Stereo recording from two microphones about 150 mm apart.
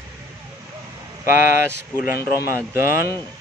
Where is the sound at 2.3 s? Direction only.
15° right (ahead or behind).